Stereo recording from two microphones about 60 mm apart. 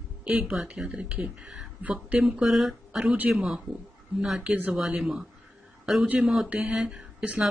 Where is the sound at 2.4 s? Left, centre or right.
Centre.